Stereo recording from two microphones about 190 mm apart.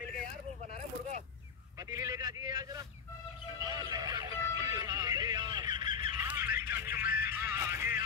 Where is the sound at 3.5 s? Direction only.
20° right (ahead or behind).